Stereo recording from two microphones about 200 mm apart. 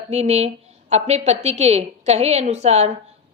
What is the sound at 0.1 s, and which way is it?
A woman's voice, 35° right (ahead or behind).